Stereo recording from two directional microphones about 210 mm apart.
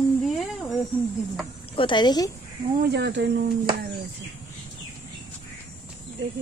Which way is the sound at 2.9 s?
55° right (ahead or behind).